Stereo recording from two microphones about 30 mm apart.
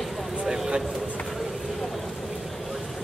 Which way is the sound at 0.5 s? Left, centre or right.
Centre.